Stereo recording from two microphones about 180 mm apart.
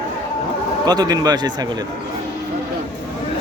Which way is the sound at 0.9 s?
20° right (ahead or behind).